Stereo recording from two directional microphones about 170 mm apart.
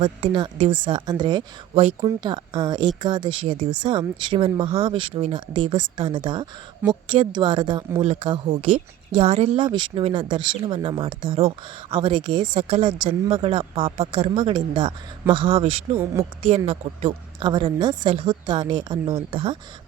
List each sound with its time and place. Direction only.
0.0 s a woman's voice: 30° right (ahead or behind)
1.7 s speech: 35° right (ahead or behind)
2.0 s a woman's voice: 25° right (ahead or behind)